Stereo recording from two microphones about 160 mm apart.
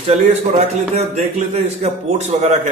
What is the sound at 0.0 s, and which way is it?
A man's voice, 45° right (ahead or behind).